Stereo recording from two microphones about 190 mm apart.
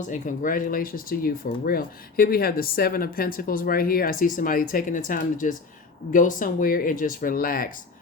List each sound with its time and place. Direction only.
0.1 s speech: 45° left (ahead or behind)